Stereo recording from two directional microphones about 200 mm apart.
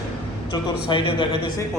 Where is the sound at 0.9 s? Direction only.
25° left (ahead or behind).